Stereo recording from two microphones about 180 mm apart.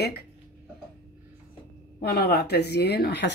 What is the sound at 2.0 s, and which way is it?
Speech, 60° left (ahead or behind).